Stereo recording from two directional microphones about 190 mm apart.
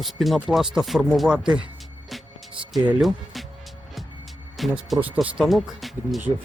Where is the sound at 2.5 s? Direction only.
25° right (ahead or behind).